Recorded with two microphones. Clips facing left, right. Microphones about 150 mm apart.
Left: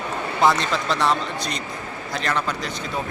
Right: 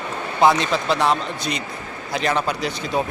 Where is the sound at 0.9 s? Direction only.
5° right (ahead or behind).